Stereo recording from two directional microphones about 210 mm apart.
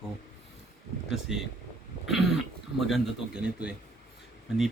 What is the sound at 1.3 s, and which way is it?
Speech, centre (ahead or behind).